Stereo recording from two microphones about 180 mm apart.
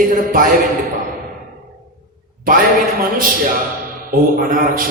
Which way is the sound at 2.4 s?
50° right (ahead or behind).